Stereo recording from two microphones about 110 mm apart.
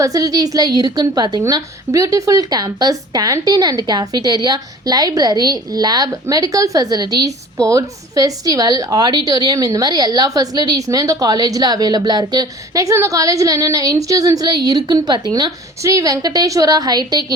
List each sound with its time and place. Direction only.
0.0 s a woman's voice: 35° right (ahead or behind)